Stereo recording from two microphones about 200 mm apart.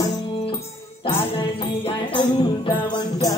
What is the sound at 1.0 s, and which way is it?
Music, 25° left (ahead or behind).